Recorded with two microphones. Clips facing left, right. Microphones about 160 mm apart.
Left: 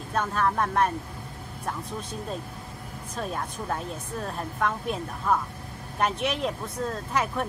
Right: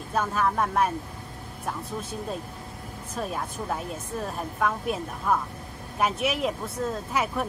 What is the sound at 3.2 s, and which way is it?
A woman's voice, 5° right (ahead or behind).